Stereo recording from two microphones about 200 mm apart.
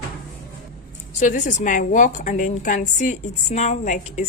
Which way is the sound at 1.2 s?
40° left (ahead or behind).